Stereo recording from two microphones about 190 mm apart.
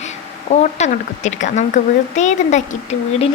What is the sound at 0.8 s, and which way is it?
Speech, 40° left (ahead or behind).